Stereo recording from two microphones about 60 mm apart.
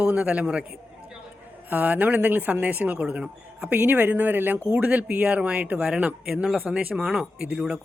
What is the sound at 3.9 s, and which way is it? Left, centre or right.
A man's voice, right.